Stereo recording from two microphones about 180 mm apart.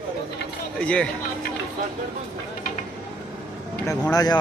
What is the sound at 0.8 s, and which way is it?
Speech, 5° left (ahead or behind).